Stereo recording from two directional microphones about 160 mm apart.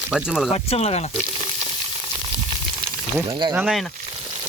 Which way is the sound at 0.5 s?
40° left (ahead or behind).